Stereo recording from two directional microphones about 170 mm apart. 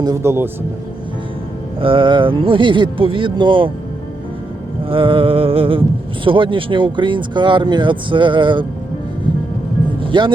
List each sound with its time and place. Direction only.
0.0 s speech: 15° right (ahead or behind)
1.8 s speech: 30° right (ahead or behind)
4.9 s music: 30° right (ahead or behind)
6.2 s speech: 30° right (ahead or behind)
10.0 s speech: 30° right (ahead or behind)